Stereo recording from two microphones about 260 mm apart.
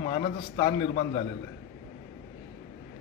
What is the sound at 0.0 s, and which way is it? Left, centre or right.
A man's voice, centre.